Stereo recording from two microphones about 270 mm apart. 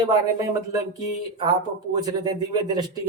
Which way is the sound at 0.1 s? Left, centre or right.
Centre.